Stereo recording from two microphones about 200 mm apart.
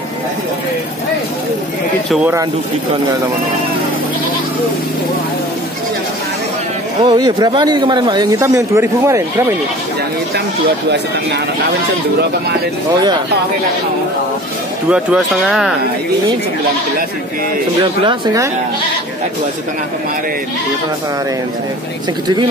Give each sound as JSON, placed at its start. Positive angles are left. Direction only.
{"t": 7.0, "sound": "speech", "side_deg": -20}
{"t": 14.9, "sound": "speech", "side_deg": -5}
{"t": 18.0, "sound": "speech", "side_deg": -20}